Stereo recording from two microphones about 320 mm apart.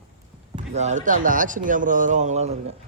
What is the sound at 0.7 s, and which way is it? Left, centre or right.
Speech, right.